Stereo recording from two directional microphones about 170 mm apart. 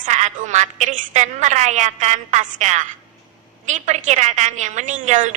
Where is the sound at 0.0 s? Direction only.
45° right (ahead or behind).